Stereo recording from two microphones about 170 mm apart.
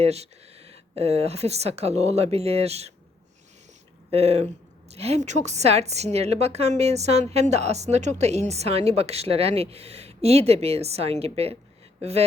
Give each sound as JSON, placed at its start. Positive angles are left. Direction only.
{"t": 0.0, "sound": "a woman's voice", "side_deg": -40}
{"t": 4.1, "sound": "a woman's voice", "side_deg": -35}